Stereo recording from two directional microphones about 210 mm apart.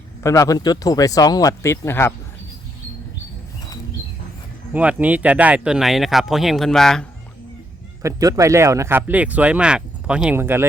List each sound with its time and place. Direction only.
0.2 s speech: 15° left (ahead or behind)
4.7 s speech: 5° right (ahead or behind)
8.0 s speech: 15° right (ahead or behind)